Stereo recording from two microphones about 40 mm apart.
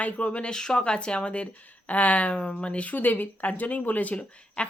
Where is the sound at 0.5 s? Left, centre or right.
Centre.